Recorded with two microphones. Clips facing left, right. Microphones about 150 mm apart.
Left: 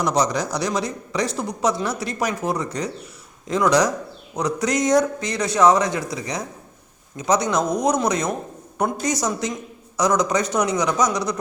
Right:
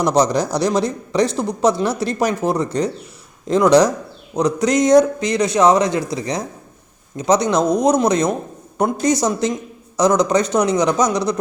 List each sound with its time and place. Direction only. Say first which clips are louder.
0.0 s speech: right 5 dB; 30° right (ahead or behind)